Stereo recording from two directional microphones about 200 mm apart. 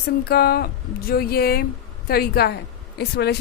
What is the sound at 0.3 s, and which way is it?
A woman's voice, 50° left (ahead or behind).